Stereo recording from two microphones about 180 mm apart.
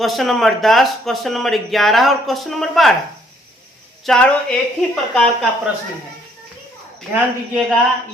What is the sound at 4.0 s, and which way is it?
Speech, 5° left (ahead or behind).